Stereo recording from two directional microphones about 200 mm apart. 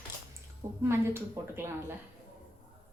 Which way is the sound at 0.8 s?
10° right (ahead or behind).